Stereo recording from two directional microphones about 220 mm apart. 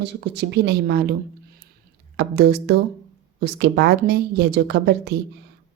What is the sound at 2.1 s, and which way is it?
Speech, 50° right (ahead or behind).